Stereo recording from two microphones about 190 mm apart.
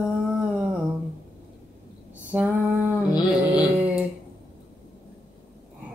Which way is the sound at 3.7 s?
10° right (ahead or behind).